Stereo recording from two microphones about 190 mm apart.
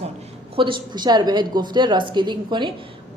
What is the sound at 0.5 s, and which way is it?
A woman's voice, 25° right (ahead or behind).